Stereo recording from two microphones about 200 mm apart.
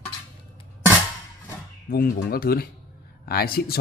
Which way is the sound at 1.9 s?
45° left (ahead or behind).